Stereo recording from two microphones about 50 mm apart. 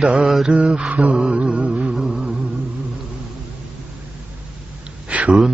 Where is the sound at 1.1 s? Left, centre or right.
Centre.